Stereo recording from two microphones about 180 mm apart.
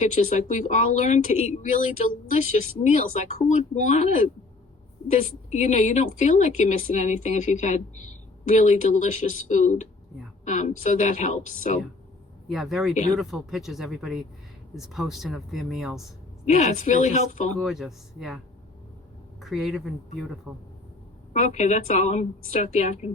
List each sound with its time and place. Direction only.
0.0 s speech: 45° left (ahead or behind)
5.5 s speech: 40° left (ahead or behind)
12.5 s speech: centre (ahead or behind)
16.5 s speech: 40° left (ahead or behind)
17.6 s speech: centre (ahead or behind)
19.4 s speech: centre (ahead or behind)
21.3 s speech: 40° left (ahead or behind)